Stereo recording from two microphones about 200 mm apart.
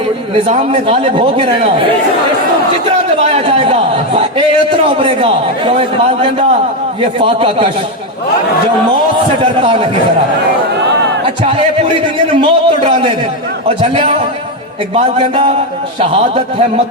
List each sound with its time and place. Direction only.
0.4 s speech: 30° right (ahead or behind)
3.2 s a sound: 30° right (ahead or behind)
4.9 s a man's voice: 25° right (ahead or behind)
12.3 s a man's voice: 25° right (ahead or behind)
16.0 s a man's voice: 30° right (ahead or behind)